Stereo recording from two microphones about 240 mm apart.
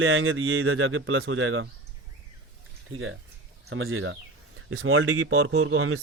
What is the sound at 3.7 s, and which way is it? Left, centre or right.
Speech, right.